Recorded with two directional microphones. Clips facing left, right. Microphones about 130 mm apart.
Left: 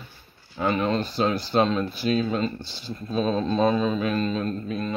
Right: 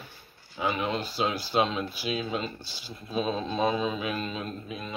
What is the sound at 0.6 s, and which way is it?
Speech, 5° right (ahead or behind).